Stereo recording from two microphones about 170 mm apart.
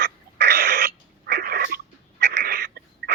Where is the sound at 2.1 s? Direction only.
80° right; by 2.7 s 65° right (ahead or behind).